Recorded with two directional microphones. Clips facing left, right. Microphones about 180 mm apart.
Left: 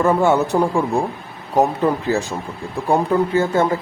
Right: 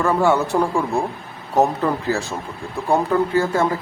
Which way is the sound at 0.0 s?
20° left (ahead or behind).